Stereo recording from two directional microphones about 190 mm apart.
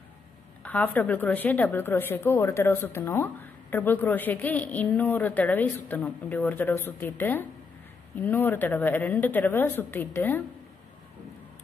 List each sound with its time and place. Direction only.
0.7 s a woman's voice: 10° left (ahead or behind)